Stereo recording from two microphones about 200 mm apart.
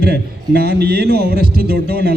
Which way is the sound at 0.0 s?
50° right (ahead or behind).